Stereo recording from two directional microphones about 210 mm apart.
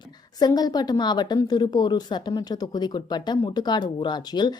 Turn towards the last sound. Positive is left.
turn(degrees=20)  # may be behind; listen again after turning